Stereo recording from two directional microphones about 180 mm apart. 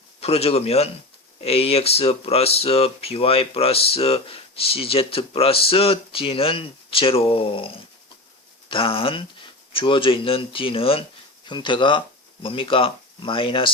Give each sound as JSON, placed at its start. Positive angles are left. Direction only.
{"t": 0.2, "sound": "speech", "side_deg": 35}
{"t": 8.7, "sound": "speech", "side_deg": 30}